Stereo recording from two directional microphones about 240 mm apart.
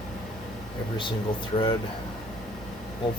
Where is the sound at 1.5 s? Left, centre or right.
Left.